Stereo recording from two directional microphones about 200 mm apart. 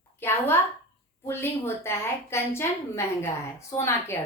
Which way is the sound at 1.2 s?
10° left (ahead or behind).